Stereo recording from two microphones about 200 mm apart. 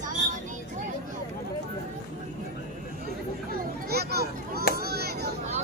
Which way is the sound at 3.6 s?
50° right (ahead or behind).